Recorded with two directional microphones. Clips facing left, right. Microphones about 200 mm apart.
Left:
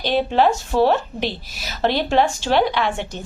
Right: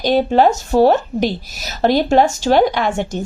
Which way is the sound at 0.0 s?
45° right (ahead or behind).